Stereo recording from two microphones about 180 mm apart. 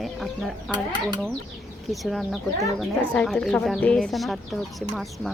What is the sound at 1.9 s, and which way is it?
Speech, centre (ahead or behind).